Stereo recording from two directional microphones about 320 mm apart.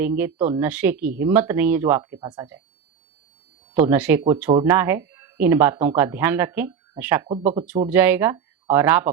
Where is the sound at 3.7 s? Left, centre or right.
Centre.